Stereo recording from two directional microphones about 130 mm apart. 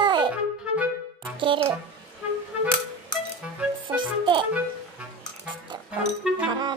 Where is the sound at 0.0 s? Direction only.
35° right (ahead or behind).